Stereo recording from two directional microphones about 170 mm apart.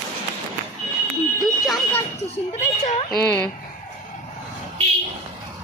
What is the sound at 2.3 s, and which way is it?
Speech, 40° left (ahead or behind).